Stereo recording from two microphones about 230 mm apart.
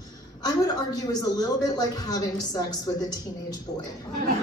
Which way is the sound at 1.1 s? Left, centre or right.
Centre.